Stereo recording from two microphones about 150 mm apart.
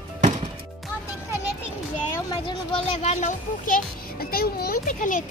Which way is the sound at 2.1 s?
30° left (ahead or behind).